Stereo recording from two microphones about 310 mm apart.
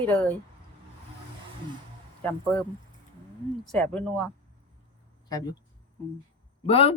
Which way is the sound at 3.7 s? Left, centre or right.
Centre.